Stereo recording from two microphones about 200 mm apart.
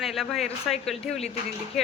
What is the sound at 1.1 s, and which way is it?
Speech, 30° left (ahead or behind).